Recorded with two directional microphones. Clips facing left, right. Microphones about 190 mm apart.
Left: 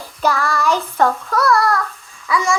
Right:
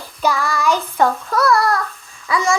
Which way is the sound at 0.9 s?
10° right (ahead or behind).